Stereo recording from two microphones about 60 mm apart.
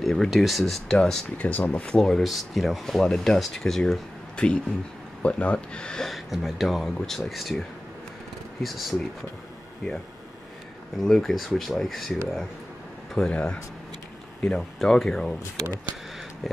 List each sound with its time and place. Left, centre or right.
0.0 s speech: centre
0.9 s speech: centre
2.2 s speech: centre
6.0 s speech: centre
8.6 s speech: centre
11.0 s speech: centre
13.3 s speech: centre